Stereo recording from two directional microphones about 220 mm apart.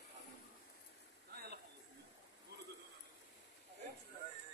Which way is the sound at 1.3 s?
45° right (ahead or behind).